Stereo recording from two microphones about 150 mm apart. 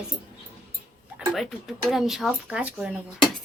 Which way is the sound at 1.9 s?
Centre (ahead or behind).